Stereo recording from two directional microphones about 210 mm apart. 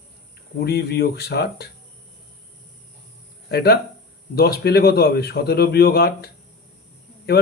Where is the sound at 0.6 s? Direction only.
50° left (ahead or behind).